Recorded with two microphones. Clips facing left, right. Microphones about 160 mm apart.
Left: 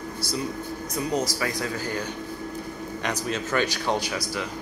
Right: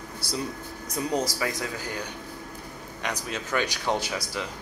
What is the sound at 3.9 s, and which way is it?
Speech, 25° right (ahead or behind).